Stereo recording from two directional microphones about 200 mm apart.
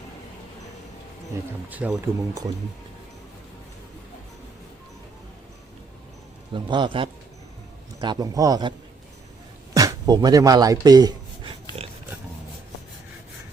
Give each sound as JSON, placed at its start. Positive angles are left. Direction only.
{"t": 1.7, "sound": "speech", "side_deg": -5}
{"t": 6.5, "sound": "speech", "side_deg": -25}
{"t": 9.7, "sound": "speech", "side_deg": -20}